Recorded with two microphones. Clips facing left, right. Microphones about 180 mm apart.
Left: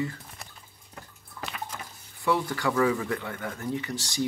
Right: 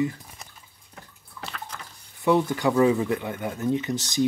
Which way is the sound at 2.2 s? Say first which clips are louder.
Right 5 dB; 20° right (ahead or behind).